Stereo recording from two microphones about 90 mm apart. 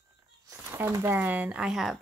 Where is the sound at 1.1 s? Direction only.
20° right (ahead or behind).